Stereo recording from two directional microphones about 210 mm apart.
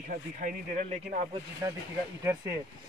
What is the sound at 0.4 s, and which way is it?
Speech, 40° right (ahead or behind).